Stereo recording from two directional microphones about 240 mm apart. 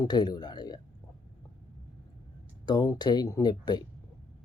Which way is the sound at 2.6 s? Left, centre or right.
Centre.